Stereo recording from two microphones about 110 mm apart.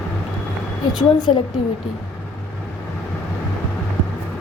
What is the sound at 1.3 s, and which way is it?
Speech, 60° left (ahead or behind).